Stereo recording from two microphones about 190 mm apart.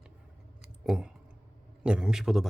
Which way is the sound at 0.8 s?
5° right (ahead or behind).